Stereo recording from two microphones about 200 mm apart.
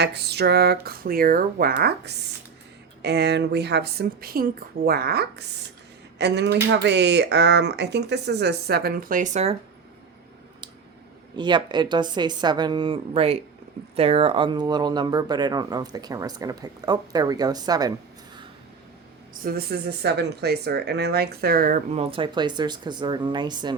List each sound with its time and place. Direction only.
0.0 s speech: 55° right (ahead or behind); by 9.6 s 35° right (ahead or behind)
11.3 s speech: 20° right (ahead or behind)
19.4 s speech: 50° right (ahead or behind); by 23.7 s 20° right (ahead or behind)